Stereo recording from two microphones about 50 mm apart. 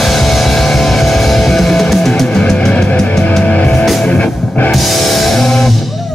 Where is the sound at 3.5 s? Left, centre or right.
Left.